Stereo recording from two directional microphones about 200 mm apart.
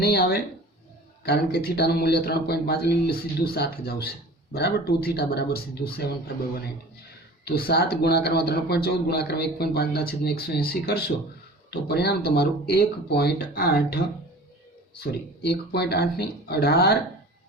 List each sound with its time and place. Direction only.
0.0 s speech: 50° left (ahead or behind)
7.4 s speech: 50° left (ahead or behind)